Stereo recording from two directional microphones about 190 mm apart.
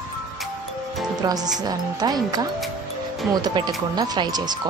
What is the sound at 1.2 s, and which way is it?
Speech, 20° right (ahead or behind).